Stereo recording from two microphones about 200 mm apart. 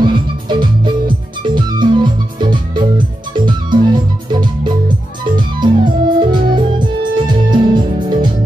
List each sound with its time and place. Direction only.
0.0 s music: 25° right (ahead or behind)